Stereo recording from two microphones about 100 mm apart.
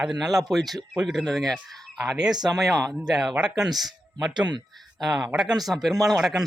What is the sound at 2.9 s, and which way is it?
A man's voice, 5° right (ahead or behind).